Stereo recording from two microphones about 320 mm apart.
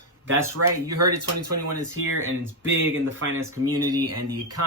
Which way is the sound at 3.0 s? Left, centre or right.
Right.